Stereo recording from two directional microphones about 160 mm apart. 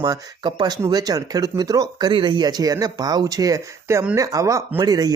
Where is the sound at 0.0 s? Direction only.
30° right (ahead or behind).